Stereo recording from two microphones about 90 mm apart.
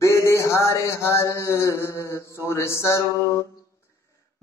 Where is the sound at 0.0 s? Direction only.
30° left (ahead or behind).